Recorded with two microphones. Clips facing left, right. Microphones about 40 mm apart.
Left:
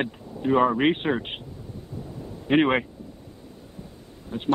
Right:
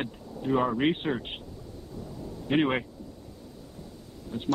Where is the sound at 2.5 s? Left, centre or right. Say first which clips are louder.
Left 5 dB; left.